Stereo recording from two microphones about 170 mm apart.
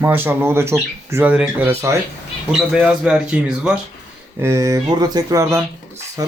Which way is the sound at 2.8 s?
5° right (ahead or behind).